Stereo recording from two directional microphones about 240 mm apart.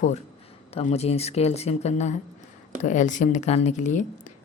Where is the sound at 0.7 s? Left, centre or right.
Left.